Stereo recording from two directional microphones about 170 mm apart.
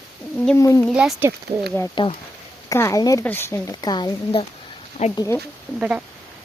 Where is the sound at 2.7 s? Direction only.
20° left (ahead or behind).